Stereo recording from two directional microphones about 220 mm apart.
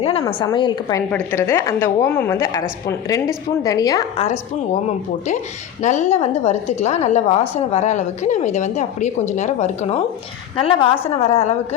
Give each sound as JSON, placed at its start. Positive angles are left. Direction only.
{"t": 0.0, "sound": "a woman's voice", "side_deg": 25}
{"t": 4.2, "sound": "a woman's voice", "side_deg": 30}
{"t": 5.8, "sound": "a woman's voice", "side_deg": 30}